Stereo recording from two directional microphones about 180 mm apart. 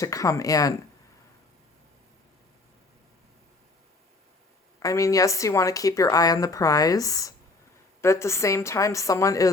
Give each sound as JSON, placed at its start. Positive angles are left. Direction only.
{"t": 0.0, "sound": "a woman's voice", "side_deg": 20}
{"t": 4.8, "sound": "a woman's voice", "side_deg": 20}